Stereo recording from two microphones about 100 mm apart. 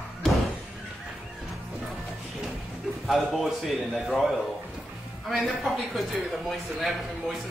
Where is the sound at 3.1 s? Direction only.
Centre (ahead or behind).